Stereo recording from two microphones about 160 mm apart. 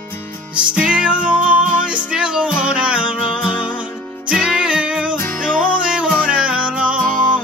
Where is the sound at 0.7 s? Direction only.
5° right (ahead or behind).